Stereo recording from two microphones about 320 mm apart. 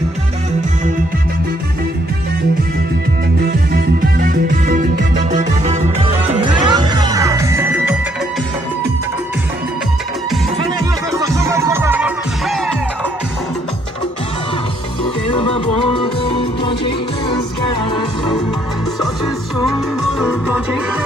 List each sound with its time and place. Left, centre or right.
3.7 s music: right; by 8.0 s centre
11.1 s music: centre
15.3 s music: centre
20.2 s music: centre